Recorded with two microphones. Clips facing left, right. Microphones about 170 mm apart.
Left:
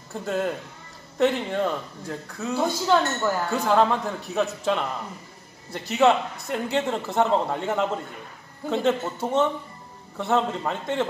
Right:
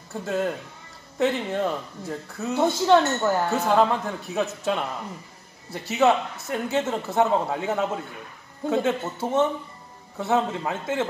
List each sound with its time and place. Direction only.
0.2 s a man's voice: centre (ahead or behind)
2.5 s a woman's voice: 20° right (ahead or behind)
3.6 s a man's voice: centre (ahead or behind)